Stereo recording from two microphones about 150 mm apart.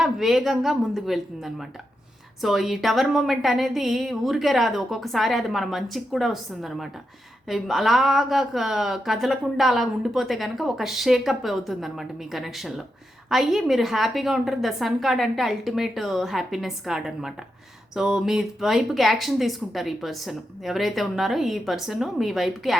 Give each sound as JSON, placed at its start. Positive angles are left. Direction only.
{"t": 0.0, "sound": "speech", "side_deg": 0}